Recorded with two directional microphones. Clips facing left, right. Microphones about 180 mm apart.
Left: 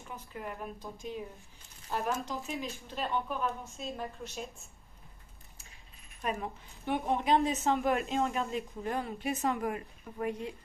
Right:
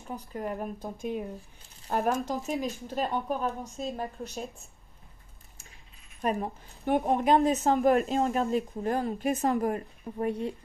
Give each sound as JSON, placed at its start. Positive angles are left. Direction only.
{"t": 0.1, "sound": "speech", "side_deg": -40}
{"t": 2.2, "sound": "speech", "side_deg": -40}
{"t": 6.2, "sound": "speech", "side_deg": -40}